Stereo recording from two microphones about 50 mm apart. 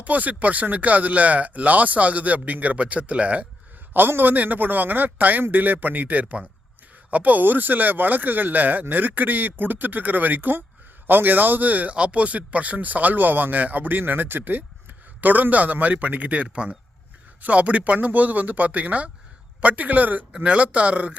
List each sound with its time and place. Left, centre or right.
0.0 s a man's voice: right
3.9 s a man's voice: right